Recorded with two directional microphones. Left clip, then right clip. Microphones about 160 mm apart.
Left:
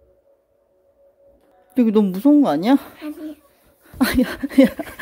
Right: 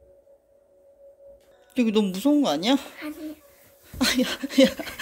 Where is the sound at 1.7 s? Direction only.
45° left (ahead or behind).